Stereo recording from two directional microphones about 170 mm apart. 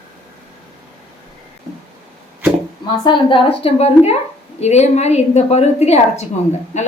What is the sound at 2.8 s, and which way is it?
A woman's voice, 30° left (ahead or behind).